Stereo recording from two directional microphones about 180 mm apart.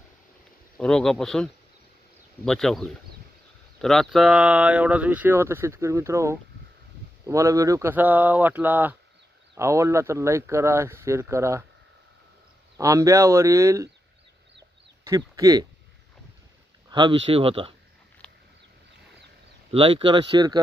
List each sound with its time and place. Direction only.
0.8 s speech: 5° left (ahead or behind); by 11.6 s 15° right (ahead or behind)
12.7 s speech: 20° right (ahead or behind)
15.0 s speech: 20° right (ahead or behind)
16.9 s speech: 25° right (ahead or behind)
18.2 s a sound: 5° left (ahead or behind)
19.7 s speech: 30° right (ahead or behind)